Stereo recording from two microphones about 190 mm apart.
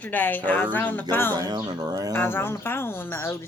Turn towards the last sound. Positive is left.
turn(degrees=15)  # may be behind; listen again after turning